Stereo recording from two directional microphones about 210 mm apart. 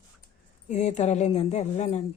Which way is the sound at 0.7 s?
35° left (ahead or behind).